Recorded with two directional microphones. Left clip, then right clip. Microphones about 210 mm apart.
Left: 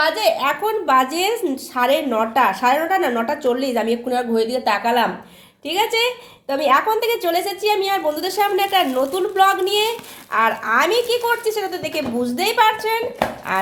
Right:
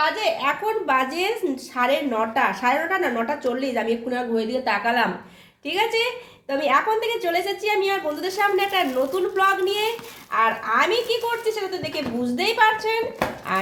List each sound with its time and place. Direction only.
0.0 s a woman's voice: 35° left (ahead or behind)